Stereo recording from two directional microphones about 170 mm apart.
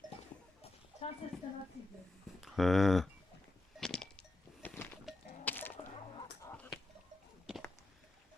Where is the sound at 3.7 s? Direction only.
5° left (ahead or behind).